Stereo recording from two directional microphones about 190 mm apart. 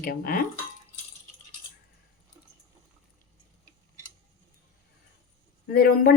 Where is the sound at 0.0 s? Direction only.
50° left (ahead or behind).